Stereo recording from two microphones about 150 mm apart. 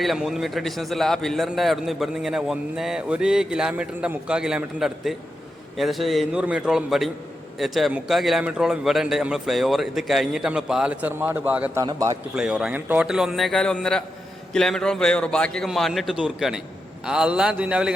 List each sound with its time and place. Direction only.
0.0 s a man's voice: centre (ahead or behind)
11.8 s a man's voice: 25° right (ahead or behind)
12.4 s a man's voice: 5° right (ahead or behind)